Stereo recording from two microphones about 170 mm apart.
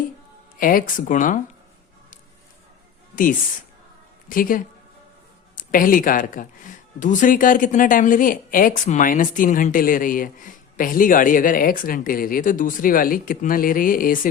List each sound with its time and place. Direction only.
0.6 s speech: 55° left (ahead or behind)
4.3 s speech: 55° left (ahead or behind)